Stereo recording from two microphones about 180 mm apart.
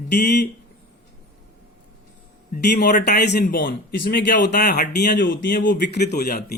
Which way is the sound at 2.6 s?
65° left (ahead or behind).